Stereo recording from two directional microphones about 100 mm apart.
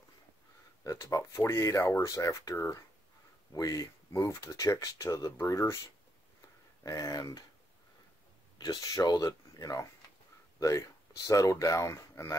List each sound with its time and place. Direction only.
0.8 s speech: 35° left (ahead or behind)
6.8 s speech: 35° left (ahead or behind)
8.5 s speech: 45° left (ahead or behind)